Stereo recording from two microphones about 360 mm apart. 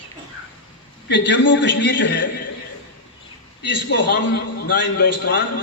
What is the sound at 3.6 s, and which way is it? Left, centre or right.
A man's voice, left.